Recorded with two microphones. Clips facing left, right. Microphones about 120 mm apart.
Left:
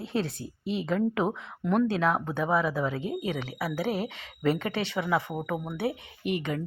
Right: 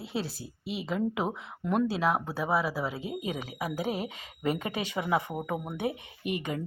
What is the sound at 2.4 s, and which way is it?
Speech, 5° right (ahead or behind).